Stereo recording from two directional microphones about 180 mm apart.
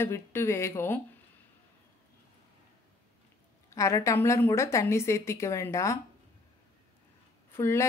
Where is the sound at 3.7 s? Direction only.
15° left (ahead or behind).